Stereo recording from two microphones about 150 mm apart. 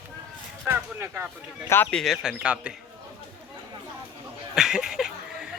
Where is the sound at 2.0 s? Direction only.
Centre (ahead or behind).